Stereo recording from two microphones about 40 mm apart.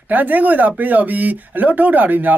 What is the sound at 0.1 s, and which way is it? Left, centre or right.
Speech, right.